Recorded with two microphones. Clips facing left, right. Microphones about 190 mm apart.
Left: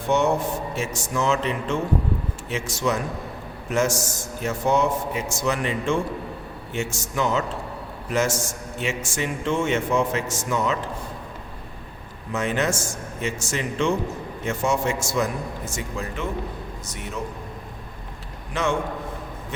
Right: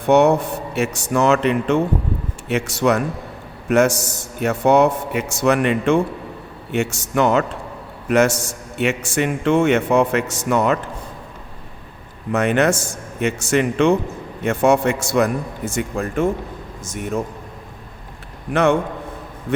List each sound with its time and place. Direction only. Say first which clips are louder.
0.0 s a man's voice: right 7 dB; 65° right (ahead or behind)
12.3 s a man's voice: right 7 dB; 65° right (ahead or behind); by 17.2 s 50° right (ahead or behind)
18.5 s a man's voice: right 8 dB; 60° right (ahead or behind)